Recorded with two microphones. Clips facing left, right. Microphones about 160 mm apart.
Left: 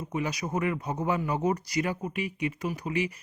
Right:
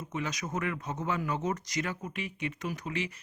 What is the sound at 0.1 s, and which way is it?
Speech, 10° left (ahead or behind).